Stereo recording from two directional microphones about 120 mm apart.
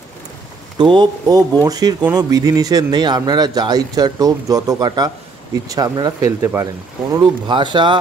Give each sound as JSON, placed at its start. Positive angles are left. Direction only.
{"t": 0.7, "sound": "speech", "side_deg": -40}
{"t": 7.4, "sound": "speech", "side_deg": -40}